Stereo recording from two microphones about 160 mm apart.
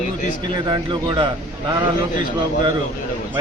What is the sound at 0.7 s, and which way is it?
Speech, 30° right (ahead or behind).